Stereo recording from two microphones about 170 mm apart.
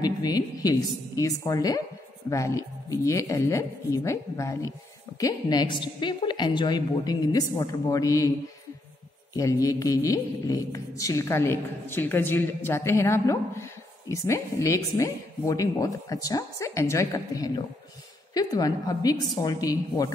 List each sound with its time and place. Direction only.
0.0 s speech: 20° left (ahead or behind)
9.3 s speech: 20° left (ahead or behind)